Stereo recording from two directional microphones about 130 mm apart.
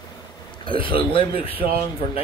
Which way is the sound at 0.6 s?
40° left (ahead or behind).